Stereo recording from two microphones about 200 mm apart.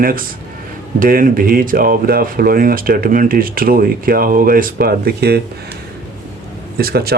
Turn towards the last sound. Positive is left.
turn(degrees=-50)  # may be behind; listen again after turning